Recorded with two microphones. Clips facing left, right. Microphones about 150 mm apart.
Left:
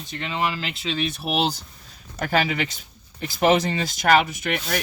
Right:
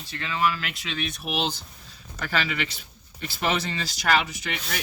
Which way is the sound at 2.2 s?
50° left (ahead or behind).